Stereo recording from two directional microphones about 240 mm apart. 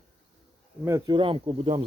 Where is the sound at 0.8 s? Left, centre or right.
Centre.